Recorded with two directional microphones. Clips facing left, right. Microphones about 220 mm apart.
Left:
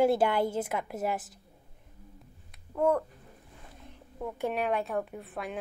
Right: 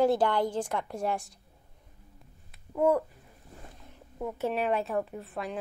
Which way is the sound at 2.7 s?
10° right (ahead or behind).